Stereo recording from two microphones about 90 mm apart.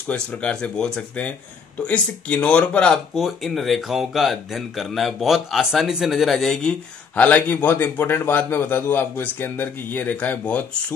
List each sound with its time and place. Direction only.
0.1 s speech: 15° left (ahead or behind)
3.2 s speech: centre (ahead or behind)